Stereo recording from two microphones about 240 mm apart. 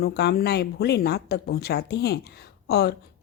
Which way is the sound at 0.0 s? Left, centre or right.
Left.